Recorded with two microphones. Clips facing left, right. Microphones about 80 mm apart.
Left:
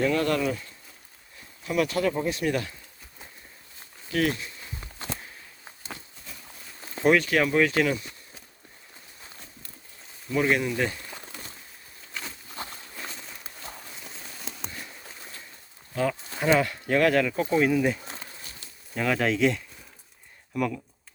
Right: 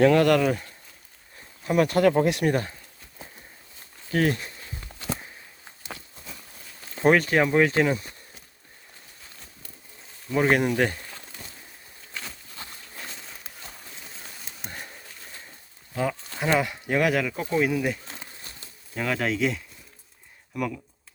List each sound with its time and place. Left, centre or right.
0.0 s speech: right
1.6 s speech: right
2.4 s speech: right
4.1 s speech: right
5.0 s a sound: centre
7.0 s speech: right
10.3 s speech: right
13.1 s a sound: centre
16.6 s speech: centre